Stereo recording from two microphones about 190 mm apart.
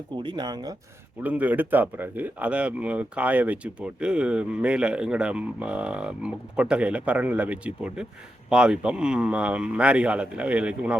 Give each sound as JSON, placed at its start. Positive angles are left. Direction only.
{"t": 0.2, "sound": "speech", "side_deg": -25}
{"t": 1.2, "sound": "speech", "side_deg": -10}